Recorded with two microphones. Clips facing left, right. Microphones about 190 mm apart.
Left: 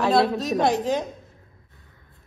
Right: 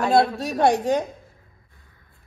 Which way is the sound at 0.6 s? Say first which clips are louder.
Right 5 dB; 60° right (ahead or behind).